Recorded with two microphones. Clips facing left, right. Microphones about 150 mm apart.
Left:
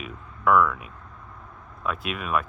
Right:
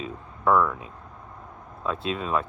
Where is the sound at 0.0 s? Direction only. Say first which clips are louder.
Even; 30° right (ahead or behind).